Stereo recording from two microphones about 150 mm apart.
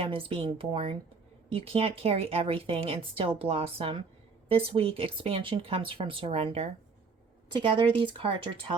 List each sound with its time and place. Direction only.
0.1 s speech: 35° right (ahead or behind)